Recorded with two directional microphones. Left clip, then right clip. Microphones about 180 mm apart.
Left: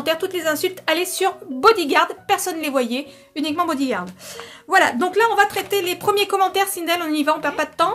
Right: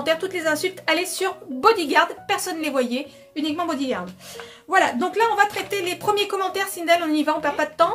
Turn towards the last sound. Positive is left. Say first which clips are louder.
# even
turn(degrees=45)  # may be behind; listen again after turning